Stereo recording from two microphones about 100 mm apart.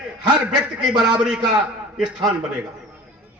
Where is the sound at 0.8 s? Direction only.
5° right (ahead or behind).